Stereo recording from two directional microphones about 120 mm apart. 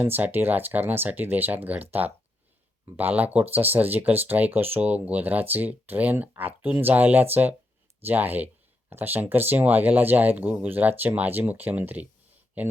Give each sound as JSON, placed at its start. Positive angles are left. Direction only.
{"t": 0.0, "sound": "speech", "side_deg": -15}